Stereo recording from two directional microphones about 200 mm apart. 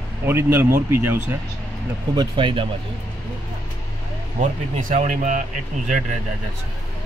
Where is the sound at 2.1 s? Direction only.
25° right (ahead or behind).